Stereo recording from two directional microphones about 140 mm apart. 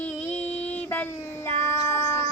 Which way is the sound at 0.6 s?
10° left (ahead or behind).